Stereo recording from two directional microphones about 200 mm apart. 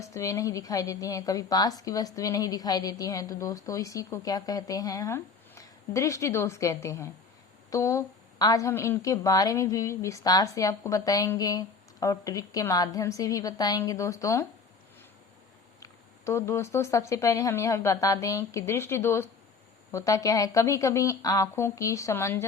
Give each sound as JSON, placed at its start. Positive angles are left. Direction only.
{"t": 0.0, "sound": "a woman's voice", "side_deg": 15}
{"t": 15.8, "sound": "a woman's voice", "side_deg": 15}